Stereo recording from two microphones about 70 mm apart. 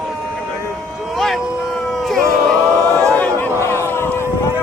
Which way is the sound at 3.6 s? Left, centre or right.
Left.